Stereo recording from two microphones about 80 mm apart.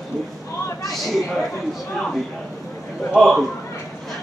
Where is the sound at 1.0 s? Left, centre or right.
Centre.